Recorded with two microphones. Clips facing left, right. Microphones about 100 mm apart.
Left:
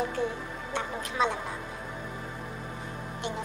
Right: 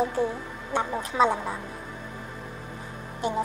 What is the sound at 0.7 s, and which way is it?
Speech, 35° right (ahead or behind).